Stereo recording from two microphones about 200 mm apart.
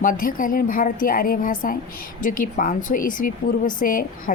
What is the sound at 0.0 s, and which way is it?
Speech, 45° left (ahead or behind).